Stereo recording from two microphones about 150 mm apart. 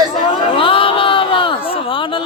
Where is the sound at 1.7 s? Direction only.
35° left (ahead or behind).